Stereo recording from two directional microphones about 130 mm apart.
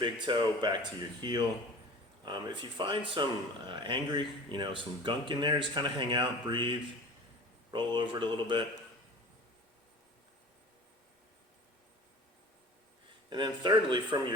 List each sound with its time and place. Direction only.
0.0 s speech: 35° right (ahead or behind)
13.3 s speech: 35° right (ahead or behind)